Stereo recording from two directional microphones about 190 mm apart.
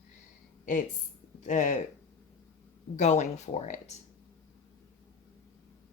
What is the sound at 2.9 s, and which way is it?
Speech, 35° left (ahead or behind).